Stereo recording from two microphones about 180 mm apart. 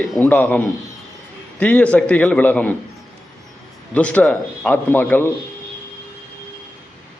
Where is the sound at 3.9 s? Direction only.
10° left (ahead or behind).